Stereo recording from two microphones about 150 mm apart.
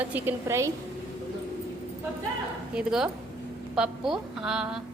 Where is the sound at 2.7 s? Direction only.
5° right (ahead or behind).